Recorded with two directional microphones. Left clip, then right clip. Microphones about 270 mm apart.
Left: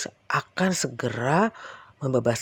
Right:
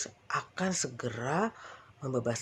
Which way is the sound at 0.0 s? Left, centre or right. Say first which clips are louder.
Left 8 dB; left.